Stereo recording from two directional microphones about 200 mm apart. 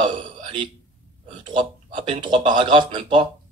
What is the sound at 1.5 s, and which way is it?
Speech, 25° right (ahead or behind).